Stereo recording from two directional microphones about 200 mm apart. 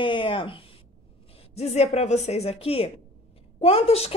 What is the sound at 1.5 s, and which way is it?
A woman's voice, 30° left (ahead or behind).